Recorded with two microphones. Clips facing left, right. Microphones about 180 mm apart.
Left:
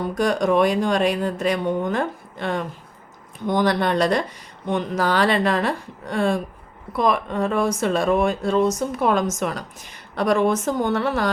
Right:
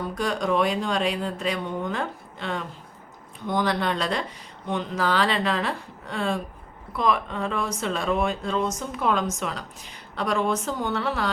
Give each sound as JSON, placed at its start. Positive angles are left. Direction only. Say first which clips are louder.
{"t": 0.1, "sound": "speech", "louder": "left 6 dB", "side_deg": 45}
{"t": 6.9, "sound": "speech", "louder": "left 4 dB", "side_deg": 45}